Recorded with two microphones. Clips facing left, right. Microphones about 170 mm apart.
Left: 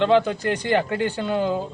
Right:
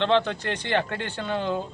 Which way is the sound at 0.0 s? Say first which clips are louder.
Left 4 dB; 10° left (ahead or behind).